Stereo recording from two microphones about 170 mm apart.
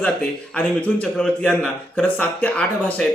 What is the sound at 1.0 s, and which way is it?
Speech, 5° left (ahead or behind).